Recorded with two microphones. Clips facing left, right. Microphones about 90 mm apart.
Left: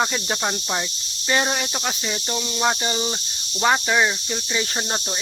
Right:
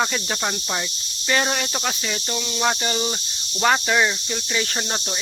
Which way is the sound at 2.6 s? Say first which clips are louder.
Even; 10° left (ahead or behind).